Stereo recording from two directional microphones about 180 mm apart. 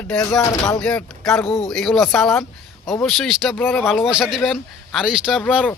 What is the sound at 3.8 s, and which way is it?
Speech, centre (ahead or behind).